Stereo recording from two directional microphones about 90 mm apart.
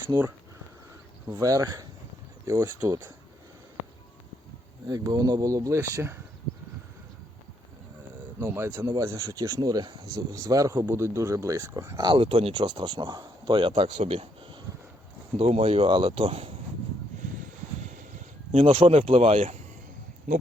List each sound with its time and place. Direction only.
0.1 s speech: 40° right (ahead or behind)
1.4 s speech: 40° right (ahead or behind)
4.9 s speech: 45° right (ahead or behind)
8.4 s speech: 30° right (ahead or behind)
11.9 s speech: 65° right (ahead or behind); by 16.5 s 90° right
18.6 s speech: 80° right